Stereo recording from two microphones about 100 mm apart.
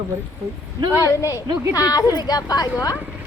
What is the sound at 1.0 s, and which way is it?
A woman's voice, 30° left (ahead or behind).